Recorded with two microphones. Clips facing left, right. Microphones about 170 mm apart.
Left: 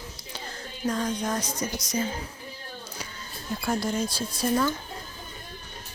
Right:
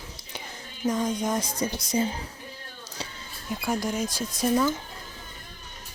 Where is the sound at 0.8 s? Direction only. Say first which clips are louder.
Right 2 dB; 20° right (ahead or behind).